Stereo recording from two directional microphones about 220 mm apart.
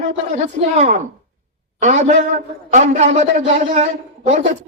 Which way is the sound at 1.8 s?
35° right (ahead or behind).